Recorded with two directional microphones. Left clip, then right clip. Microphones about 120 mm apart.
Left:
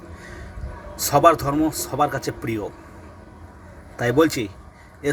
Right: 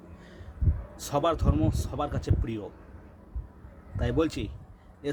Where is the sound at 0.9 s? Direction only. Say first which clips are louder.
Left 12 dB; 20° right (ahead or behind).